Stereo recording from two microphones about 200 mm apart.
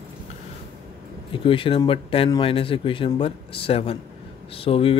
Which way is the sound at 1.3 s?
25° left (ahead or behind).